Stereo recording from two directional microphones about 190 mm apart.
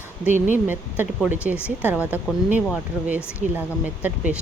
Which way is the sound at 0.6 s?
10° right (ahead or behind).